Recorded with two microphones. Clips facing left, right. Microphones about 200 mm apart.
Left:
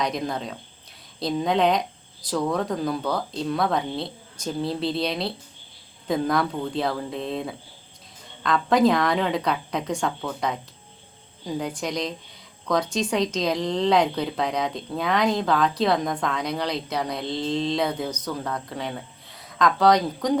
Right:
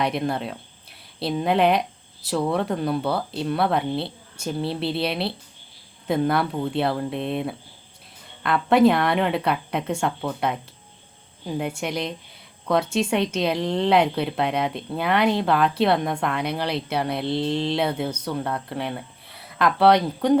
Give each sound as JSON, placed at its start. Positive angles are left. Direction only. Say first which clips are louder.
{"t": 0.0, "sound": "speech", "louder": "right 3 dB", "side_deg": -5}
{"t": 17.3, "sound": "mantra", "louder": "right 1 dB", "side_deg": -70}
{"t": 17.7, "sound": "speech", "louder": "right 1 dB", "side_deg": -5}